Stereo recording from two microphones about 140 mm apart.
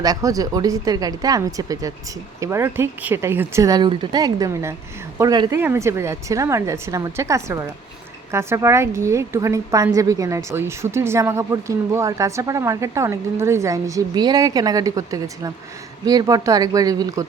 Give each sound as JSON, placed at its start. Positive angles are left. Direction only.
{"t": 0.0, "sound": "a woman's voice", "side_deg": -25}